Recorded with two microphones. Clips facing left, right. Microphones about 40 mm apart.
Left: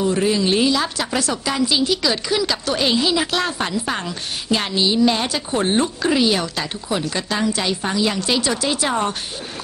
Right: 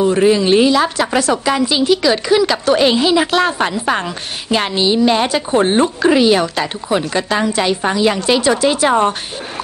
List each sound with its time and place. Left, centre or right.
0.0 s a woman's voice: right